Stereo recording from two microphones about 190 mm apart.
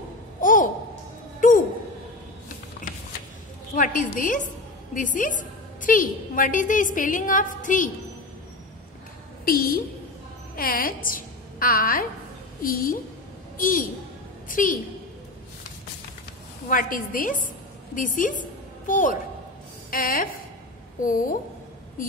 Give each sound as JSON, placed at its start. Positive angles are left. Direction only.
{"t": 0.4, "sound": "a sound", "side_deg": 45}
{"t": 3.7, "sound": "a woman's voice", "side_deg": 45}
{"t": 9.4, "sound": "a woman's voice", "side_deg": 50}
{"t": 16.6, "sound": "a woman's voice", "side_deg": 45}